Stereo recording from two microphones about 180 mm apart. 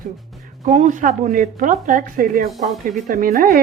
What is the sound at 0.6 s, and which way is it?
Speech, 40° right (ahead or behind).